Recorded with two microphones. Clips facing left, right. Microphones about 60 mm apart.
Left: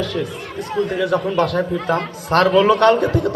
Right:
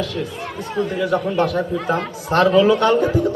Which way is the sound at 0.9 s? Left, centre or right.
Left.